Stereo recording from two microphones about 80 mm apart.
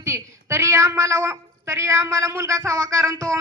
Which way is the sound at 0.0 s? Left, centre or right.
Right.